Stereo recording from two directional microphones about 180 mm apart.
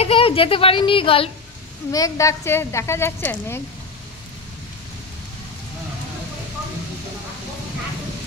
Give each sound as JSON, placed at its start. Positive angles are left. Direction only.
{"t": 0.0, "sound": "speech", "side_deg": 30}
{"t": 1.9, "sound": "a woman's voice", "side_deg": 20}